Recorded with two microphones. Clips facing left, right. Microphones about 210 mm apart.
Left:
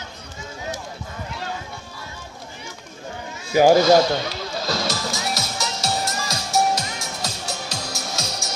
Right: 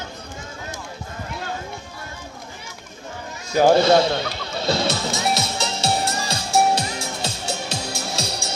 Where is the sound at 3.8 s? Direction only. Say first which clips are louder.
Left 1 dB; 30° right (ahead or behind).